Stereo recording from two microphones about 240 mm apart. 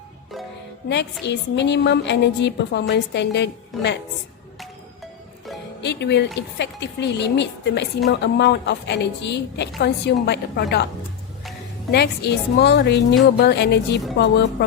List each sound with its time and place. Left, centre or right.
1.2 s speech: left
5.8 s speech: left
11.9 s speech: left